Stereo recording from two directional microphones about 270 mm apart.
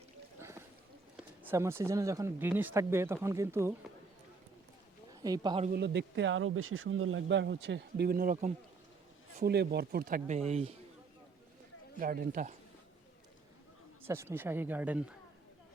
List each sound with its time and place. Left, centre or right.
0.3 s a sound: centre
1.1 s speech: centre
5.2 s speech: centre
5.7 s speech: right
11.9 s speech: right
14.1 s speech: centre